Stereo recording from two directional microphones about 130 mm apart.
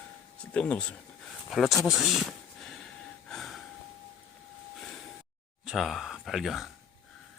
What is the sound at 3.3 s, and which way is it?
Gasp, centre (ahead or behind).